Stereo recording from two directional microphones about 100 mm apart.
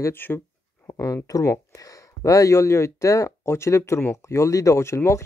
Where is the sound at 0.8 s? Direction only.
35° left (ahead or behind).